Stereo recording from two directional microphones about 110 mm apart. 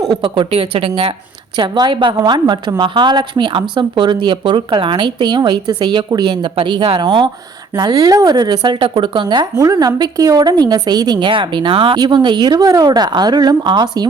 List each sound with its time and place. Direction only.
0.0 s speech: 45° right (ahead or behind)
1.5 s a woman's voice: 45° right (ahead or behind)